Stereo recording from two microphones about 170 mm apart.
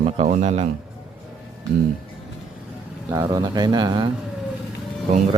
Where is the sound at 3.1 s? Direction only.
20° right (ahead or behind).